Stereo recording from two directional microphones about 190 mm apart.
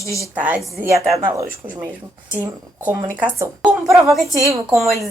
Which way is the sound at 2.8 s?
10° right (ahead or behind).